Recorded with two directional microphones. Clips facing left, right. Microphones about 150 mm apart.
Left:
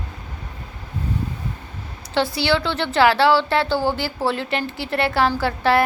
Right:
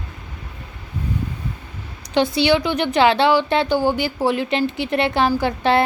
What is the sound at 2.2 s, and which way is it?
A woman's voice, 20° right (ahead or behind).